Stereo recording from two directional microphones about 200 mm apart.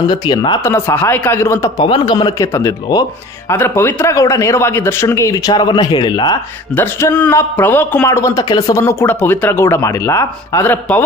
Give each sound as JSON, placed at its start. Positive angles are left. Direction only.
{"t": 0.1, "sound": "a man's voice", "side_deg": 20}
{"t": 1.9, "sound": "a man's voice", "side_deg": 25}